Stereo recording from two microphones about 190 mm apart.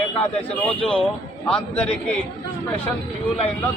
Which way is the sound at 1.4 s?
5° left (ahead or behind).